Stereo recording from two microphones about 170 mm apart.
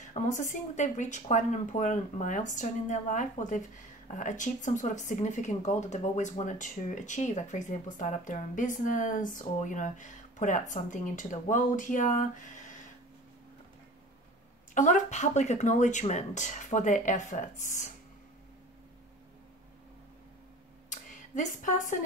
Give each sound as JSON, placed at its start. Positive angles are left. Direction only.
{"t": 0.1, "sound": "speech", "side_deg": 45}
{"t": 14.7, "sound": "speech", "side_deg": 50}
{"t": 20.9, "sound": "a sound", "side_deg": 50}